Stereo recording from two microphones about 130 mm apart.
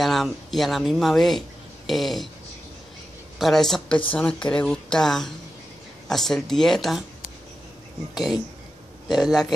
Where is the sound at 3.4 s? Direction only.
5° left (ahead or behind).